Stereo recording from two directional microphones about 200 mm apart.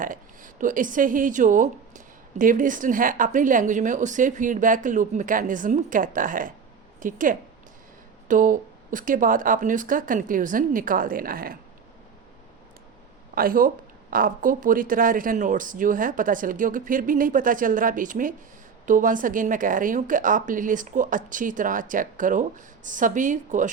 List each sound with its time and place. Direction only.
0.0 s a woman's voice: 40° right (ahead or behind)
13.3 s a woman's voice: 45° right (ahead or behind)